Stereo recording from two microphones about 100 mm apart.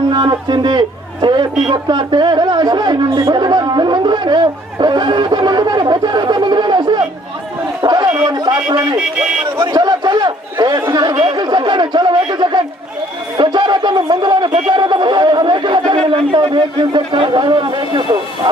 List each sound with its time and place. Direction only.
0.1 s a sound: 50° right (ahead or behind)
1.7 s speech: 45° right (ahead or behind)
7.8 s chatter: 50° right (ahead or behind)
8.3 s speech: 45° right (ahead or behind)